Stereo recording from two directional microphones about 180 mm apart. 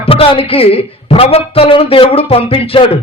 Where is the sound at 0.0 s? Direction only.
30° left (ahead or behind).